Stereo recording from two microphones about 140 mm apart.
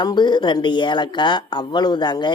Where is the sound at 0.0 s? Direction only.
30° left (ahead or behind).